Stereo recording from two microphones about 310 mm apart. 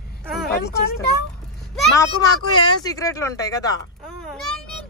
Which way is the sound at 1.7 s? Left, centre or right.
Centre.